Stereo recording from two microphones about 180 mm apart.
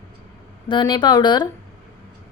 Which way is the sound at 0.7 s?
25° left (ahead or behind).